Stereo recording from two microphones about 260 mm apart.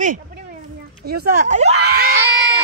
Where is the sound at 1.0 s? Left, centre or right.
Right.